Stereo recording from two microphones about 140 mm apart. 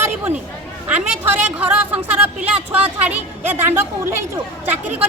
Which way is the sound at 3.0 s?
15° right (ahead or behind).